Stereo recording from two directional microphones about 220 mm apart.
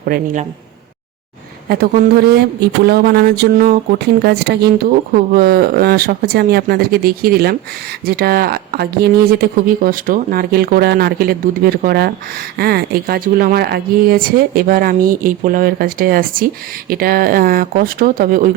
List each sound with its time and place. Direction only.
0.0 s speech: 40° right (ahead or behind)
1.7 s speech: 45° right (ahead or behind)